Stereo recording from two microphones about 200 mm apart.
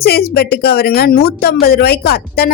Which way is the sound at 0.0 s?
50° left (ahead or behind).